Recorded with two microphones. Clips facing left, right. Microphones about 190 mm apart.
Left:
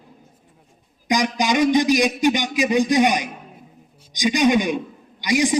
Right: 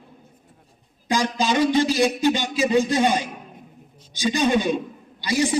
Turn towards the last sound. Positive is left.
turn(degrees=15)  # may be behind; listen again after turning